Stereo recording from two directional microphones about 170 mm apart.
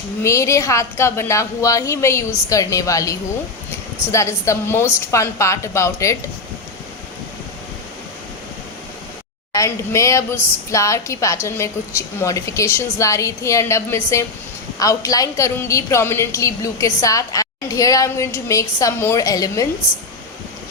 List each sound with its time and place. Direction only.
0.2 s a woman's voice: 15° left (ahead or behind)
9.5 s a woman's voice: 20° left (ahead or behind)